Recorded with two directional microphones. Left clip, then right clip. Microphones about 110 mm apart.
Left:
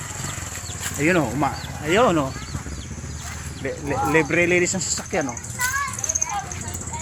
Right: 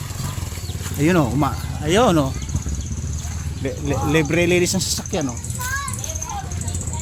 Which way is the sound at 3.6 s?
25° right (ahead or behind).